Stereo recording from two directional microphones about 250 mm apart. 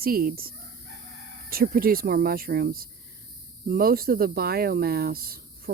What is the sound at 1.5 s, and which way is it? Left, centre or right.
Speech, right.